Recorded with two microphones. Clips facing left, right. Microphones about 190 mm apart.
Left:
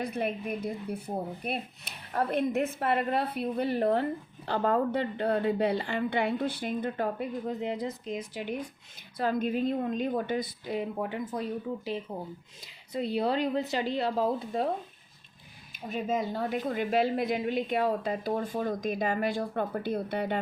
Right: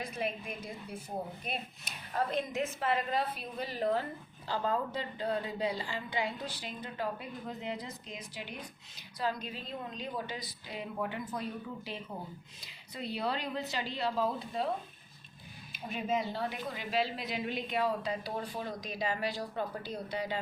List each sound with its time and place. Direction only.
0.0 s a woman's voice: 60° left (ahead or behind)
10.9 s speech: 35° left (ahead or behind)
12.9 s a woman's voice: 50° left (ahead or behind)
15.7 s a woman's voice: 45° left (ahead or behind)